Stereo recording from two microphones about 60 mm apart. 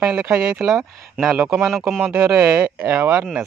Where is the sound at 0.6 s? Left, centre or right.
Centre.